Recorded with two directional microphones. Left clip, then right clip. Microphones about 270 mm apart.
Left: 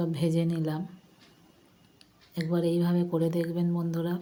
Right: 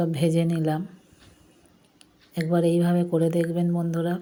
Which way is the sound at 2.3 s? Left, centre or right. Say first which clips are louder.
Right 6 dB; centre.